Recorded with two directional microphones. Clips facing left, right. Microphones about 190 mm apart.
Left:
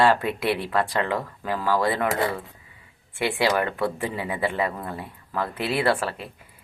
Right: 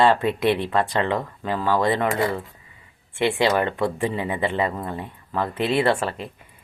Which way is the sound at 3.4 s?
20° right (ahead or behind).